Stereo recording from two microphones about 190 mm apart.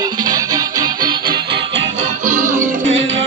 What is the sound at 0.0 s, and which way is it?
Music, 20° right (ahead or behind).